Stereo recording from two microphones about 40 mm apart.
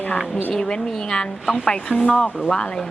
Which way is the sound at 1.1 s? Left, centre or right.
Centre.